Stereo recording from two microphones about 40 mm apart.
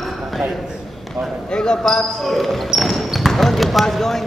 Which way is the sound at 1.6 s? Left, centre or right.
Centre.